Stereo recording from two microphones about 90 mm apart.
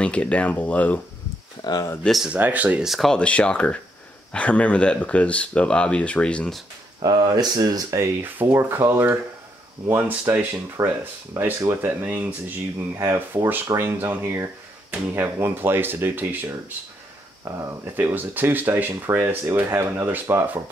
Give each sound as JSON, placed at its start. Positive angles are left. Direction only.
{"t": 0.0, "sound": "speech", "side_deg": 15}
{"t": 1.6, "sound": "speech", "side_deg": 50}
{"t": 2.2, "sound": "speech", "side_deg": -20}
{"t": 2.8, "sound": "speech", "side_deg": 0}
{"t": 3.2, "sound": "speech", "side_deg": 10}
{"t": 7.0, "sound": "speech", "side_deg": -50}
{"t": 12.9, "sound": "speech", "side_deg": -30}
{"t": 17.5, "sound": "speech", "side_deg": -35}
{"t": 17.9, "sound": "speech", "side_deg": -20}